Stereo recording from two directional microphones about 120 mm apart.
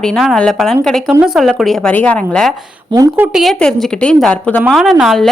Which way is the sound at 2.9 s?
30° right (ahead or behind).